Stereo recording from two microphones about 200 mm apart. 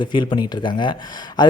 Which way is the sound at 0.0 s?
25° left (ahead or behind).